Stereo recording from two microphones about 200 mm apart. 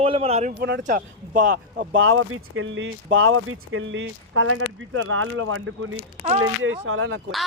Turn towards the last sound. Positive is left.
turn(degrees=-90)